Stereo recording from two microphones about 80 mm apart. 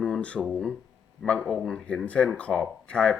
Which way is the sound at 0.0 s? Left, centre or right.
Centre.